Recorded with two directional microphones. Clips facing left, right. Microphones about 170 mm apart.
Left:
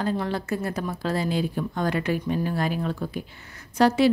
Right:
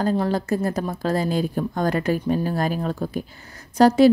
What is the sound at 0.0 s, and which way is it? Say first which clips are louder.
A woman's voice: right 5 dB; 40° right (ahead or behind).